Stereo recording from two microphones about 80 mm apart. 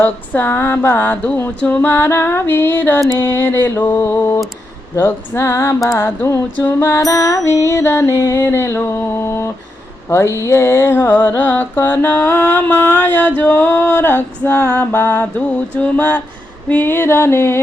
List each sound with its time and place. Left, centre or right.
0.0 s mantra: left
4.9 s music: left
10.1 s mantra: left
16.6 s music: left